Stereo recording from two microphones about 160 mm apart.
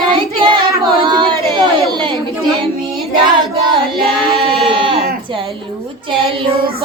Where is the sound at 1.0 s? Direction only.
30° right (ahead or behind).